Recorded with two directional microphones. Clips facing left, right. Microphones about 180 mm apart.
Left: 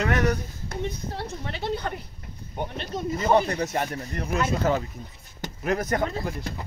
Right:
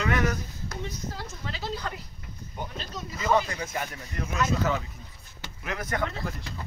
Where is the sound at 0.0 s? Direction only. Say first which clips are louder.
Left 3 dB; 40° left (ahead or behind).